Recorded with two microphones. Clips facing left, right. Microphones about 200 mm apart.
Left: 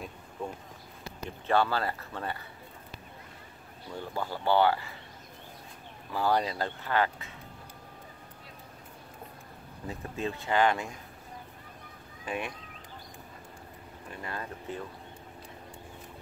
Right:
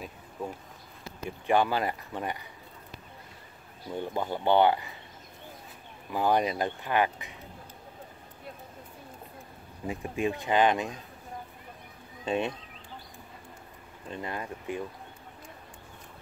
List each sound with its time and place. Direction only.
0.4 s speech: 5° right (ahead or behind)
3.9 s speech: 20° right (ahead or behind)
6.1 s speech: 20° right (ahead or behind)
9.8 s speech: 15° right (ahead or behind)
12.3 s speech: 25° right (ahead or behind)
14.1 s speech: 20° right (ahead or behind)